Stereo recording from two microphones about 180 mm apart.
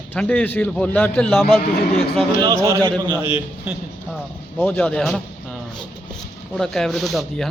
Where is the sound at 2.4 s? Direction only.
15° right (ahead or behind).